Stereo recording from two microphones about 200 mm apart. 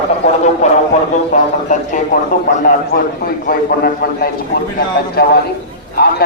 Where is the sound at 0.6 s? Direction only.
35° left (ahead or behind).